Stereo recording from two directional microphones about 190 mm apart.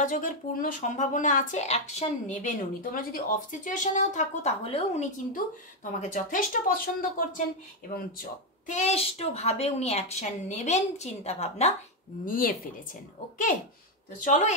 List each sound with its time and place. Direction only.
0.0 s speech: 45° left (ahead or behind)
12.3 s speech: 50° left (ahead or behind)
14.2 s speech: 40° left (ahead or behind)